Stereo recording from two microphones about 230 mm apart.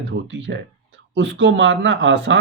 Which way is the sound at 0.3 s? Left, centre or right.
Right.